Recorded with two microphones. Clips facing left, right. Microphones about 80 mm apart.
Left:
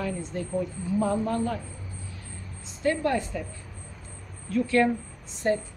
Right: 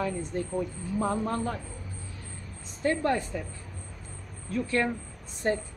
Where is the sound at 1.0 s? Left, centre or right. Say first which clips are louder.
Left 2 dB; right.